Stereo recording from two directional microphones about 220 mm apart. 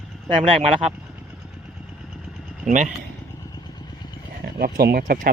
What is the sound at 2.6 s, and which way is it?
Speech, 35° right (ahead or behind).